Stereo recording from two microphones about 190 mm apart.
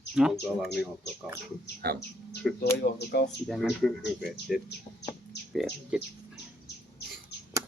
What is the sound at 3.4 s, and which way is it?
Speech, centre (ahead or behind).